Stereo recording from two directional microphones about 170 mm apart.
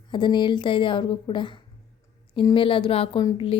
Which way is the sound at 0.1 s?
25° left (ahead or behind).